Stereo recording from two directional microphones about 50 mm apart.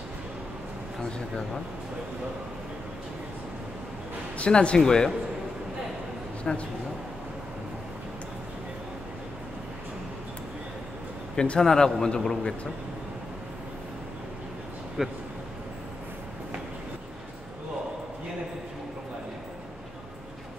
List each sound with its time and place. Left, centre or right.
4.5 s a man's voice: centre
6.5 s a man's voice: centre
11.3 s a man's voice: centre
15.0 s speech: centre